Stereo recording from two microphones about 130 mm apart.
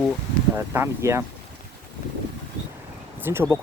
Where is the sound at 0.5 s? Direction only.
20° right (ahead or behind).